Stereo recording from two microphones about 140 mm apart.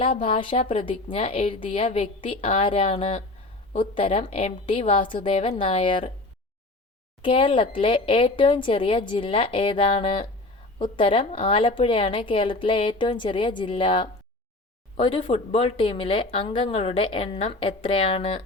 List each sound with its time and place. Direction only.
0.0 s a woman's voice: 40° left (ahead or behind)
7.2 s speech: 40° left (ahead or behind)